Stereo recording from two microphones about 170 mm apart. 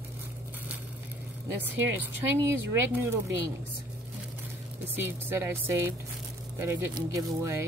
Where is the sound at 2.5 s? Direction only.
15° right (ahead or behind).